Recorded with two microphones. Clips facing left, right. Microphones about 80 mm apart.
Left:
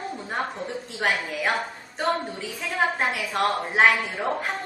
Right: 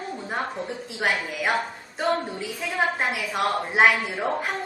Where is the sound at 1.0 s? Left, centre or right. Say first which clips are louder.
Even; centre.